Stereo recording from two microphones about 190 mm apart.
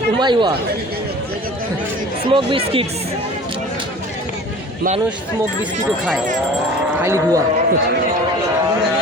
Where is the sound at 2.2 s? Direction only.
25° right (ahead or behind).